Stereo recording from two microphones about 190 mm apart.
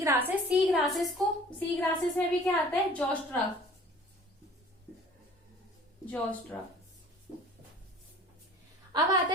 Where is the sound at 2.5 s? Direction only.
5° left (ahead or behind).